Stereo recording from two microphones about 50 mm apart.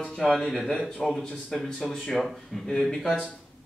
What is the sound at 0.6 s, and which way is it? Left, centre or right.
A man's voice, centre.